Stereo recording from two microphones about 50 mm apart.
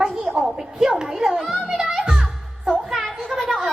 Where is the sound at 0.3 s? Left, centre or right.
Centre.